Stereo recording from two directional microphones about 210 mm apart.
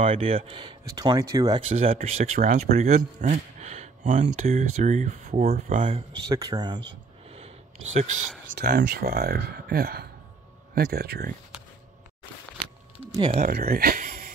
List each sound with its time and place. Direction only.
0.0 s speech: 25° right (ahead or behind)
1.7 s speech: 30° right (ahead or behind)
6.2 s speech: 15° right (ahead or behind)
7.3 s a sound: 30° right (ahead or behind)
8.5 s speech: 45° right (ahead or behind)
13.2 s speech: 35° right (ahead or behind)
13.6 s speech: 45° right (ahead or behind)